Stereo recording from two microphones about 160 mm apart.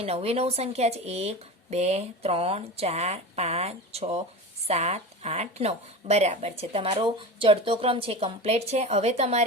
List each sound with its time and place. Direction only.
0.0 s speech: 40° right (ahead or behind)